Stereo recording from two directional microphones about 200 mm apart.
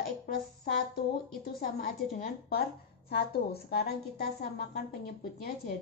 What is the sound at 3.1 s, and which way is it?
A woman's voice, 50° left (ahead or behind).